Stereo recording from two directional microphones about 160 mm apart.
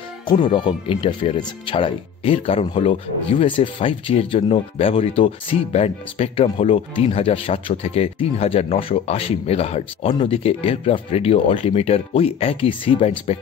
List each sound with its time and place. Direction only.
0.3 s speech: 30° left (ahead or behind)